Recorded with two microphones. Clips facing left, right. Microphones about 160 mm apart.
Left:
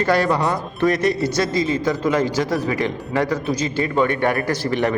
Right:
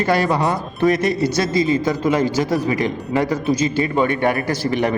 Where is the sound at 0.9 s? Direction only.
5° right (ahead or behind).